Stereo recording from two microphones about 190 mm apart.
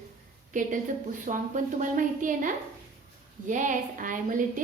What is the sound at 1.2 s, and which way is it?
A woman's voice, 45° right (ahead or behind).